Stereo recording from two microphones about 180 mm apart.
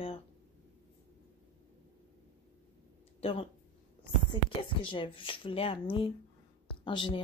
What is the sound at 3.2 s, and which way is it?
Speech, 30° left (ahead or behind).